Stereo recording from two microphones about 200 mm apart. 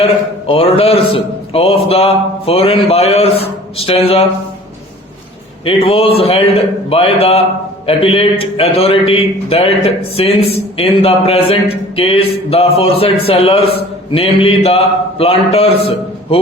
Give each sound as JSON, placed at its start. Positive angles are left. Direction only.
{"t": 0.4, "sound": "a man's voice", "side_deg": 30}
{"t": 5.6, "sound": "a man's voice", "side_deg": 30}